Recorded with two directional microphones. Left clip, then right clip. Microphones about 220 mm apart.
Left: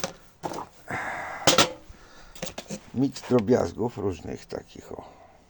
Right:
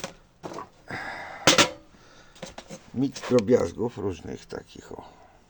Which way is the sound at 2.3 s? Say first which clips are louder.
Left 4 dB; 50° left (ahead or behind).